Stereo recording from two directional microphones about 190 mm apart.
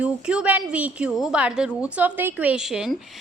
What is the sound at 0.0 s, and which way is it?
A woman's voice, 5° right (ahead or behind).